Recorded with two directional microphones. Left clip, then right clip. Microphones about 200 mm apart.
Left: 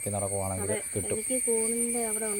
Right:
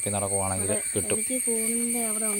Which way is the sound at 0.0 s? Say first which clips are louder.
Right 3 dB; 5° right (ahead or behind).